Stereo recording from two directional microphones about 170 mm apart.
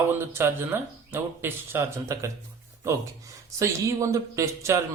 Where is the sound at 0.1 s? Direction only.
15° right (ahead or behind).